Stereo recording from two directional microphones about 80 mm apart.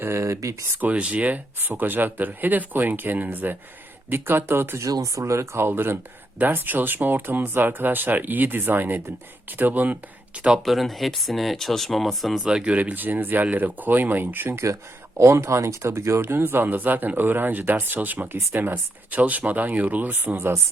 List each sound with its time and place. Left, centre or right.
0.0 s speech: right
0.8 s speech: centre
4.9 s speech: right; by 10.6 s centre
10.7 s speech: centre; by 20.5 s right